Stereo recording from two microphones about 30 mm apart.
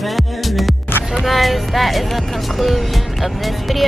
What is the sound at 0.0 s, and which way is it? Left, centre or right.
Music, centre.